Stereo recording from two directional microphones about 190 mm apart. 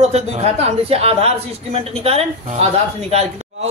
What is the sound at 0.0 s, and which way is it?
Speech, 35° right (ahead or behind).